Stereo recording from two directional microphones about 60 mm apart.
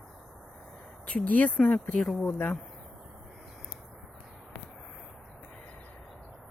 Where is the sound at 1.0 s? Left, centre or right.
Left.